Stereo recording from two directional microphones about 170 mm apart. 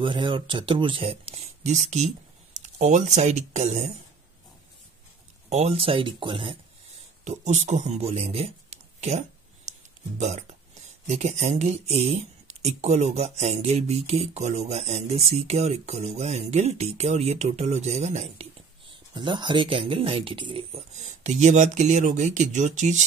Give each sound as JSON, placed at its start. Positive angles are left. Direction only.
{"t": 0.0, "sound": "speech", "side_deg": -30}
{"t": 5.5, "sound": "speech", "side_deg": -40}
{"t": 7.2, "sound": "a man's voice", "side_deg": -45}
{"t": 9.7, "sound": "music", "side_deg": -45}
{"t": 11.1, "sound": "speech", "side_deg": -40}
{"t": 19.1, "sound": "speech", "side_deg": -25}